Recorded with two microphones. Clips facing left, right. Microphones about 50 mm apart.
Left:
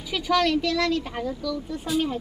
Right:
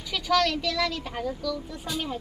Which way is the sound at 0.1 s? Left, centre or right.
Centre.